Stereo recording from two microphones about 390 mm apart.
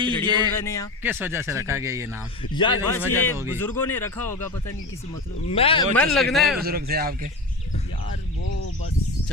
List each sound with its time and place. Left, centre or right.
0.3 s speech: centre
0.5 s speech: centre
1.0 s speech: centre
2.4 s speech: centre
3.3 s speech: centre
3.6 s speech: centre
5.5 s speech: centre
6.6 s a man's voice: right